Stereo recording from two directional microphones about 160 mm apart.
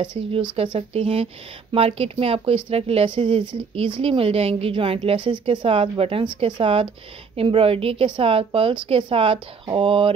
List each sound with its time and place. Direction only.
0.0 s speech: 30° right (ahead or behind)